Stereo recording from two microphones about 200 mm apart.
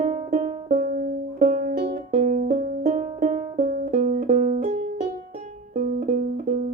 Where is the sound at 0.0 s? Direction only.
40° right (ahead or behind).